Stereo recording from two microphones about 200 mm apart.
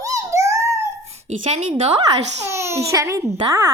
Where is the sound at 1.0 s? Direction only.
35° right (ahead or behind).